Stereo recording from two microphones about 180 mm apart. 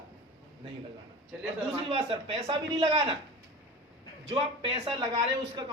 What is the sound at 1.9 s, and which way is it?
A man's voice, 30° right (ahead or behind).